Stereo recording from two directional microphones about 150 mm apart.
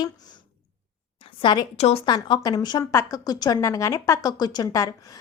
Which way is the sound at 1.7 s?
45° left (ahead or behind).